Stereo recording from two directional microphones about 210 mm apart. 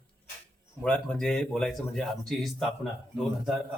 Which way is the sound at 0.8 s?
5° left (ahead or behind).